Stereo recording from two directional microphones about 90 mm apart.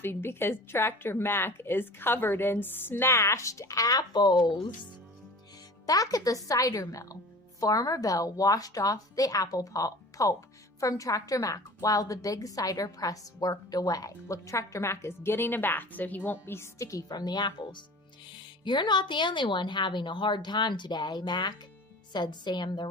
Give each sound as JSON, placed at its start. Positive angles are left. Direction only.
{"t": 0.0, "sound": "a woman's voice", "side_deg": 25}
{"t": 5.8, "sound": "a woman's voice", "side_deg": 40}